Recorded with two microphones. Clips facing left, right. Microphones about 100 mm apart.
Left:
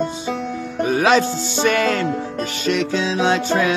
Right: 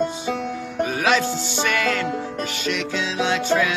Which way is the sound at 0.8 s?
35° left (ahead or behind).